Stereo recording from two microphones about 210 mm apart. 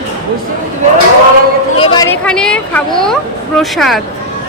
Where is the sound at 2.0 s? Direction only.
5° left (ahead or behind).